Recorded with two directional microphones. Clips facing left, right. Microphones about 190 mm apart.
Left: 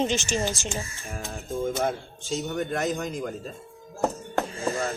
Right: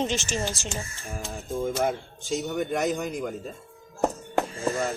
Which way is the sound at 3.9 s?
15° right (ahead or behind).